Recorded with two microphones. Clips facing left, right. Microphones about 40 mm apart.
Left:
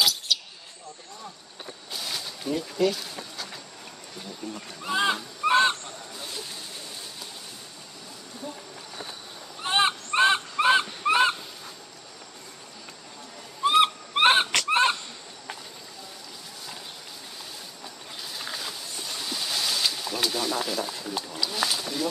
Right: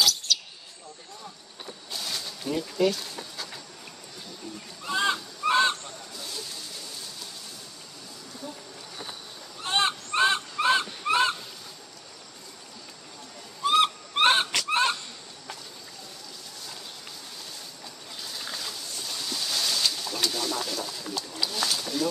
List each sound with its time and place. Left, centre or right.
0.3 s a sound: centre
1.9 s a sound: centre
2.8 s speech: centre
4.8 s goose: left
9.6 s goose: centre
13.6 s owl: left
14.7 s fowl: left
18.2 s a sound: centre
20.5 s snake: left
21.5 s wild animals: centre